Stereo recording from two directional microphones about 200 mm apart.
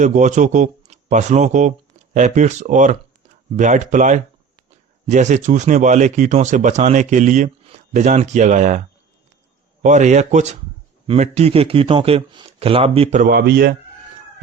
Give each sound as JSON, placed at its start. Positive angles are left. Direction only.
{"t": 0.0, "sound": "speech", "side_deg": -35}
{"t": 9.8, "sound": "speech", "side_deg": -35}
{"t": 13.3, "sound": "speech", "side_deg": -55}